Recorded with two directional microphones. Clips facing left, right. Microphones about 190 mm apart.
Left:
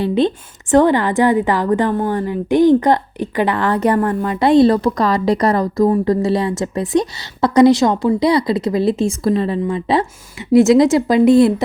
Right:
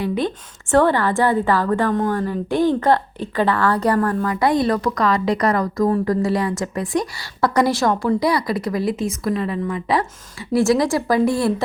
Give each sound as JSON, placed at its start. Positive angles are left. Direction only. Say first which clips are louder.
{"t": 0.0, "sound": "a woman's voice", "louder": "left 6 dB", "side_deg": 25}